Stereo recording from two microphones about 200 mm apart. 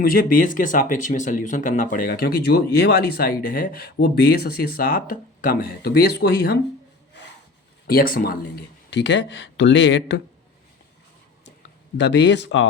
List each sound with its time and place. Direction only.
0.0 s speech: 45° left (ahead or behind)
7.9 s speech: 45° left (ahead or behind); by 10.2 s 65° left (ahead or behind)
11.9 s speech: 60° left (ahead or behind)